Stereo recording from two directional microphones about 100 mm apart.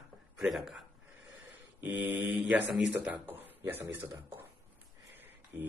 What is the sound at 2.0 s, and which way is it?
Mantra, 15° right (ahead or behind).